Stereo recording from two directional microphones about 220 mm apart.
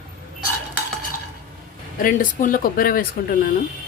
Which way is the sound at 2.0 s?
35° left (ahead or behind).